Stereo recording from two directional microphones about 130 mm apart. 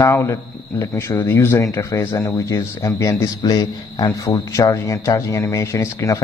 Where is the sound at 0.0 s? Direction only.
25° left (ahead or behind).